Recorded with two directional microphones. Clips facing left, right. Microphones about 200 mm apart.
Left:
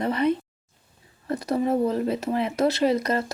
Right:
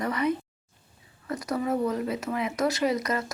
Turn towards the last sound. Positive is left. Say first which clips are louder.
# left 4 dB
turn(degrees=30)  # may be behind; listen again after turning